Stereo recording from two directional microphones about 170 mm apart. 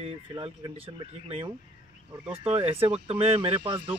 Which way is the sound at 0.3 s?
25° right (ahead or behind).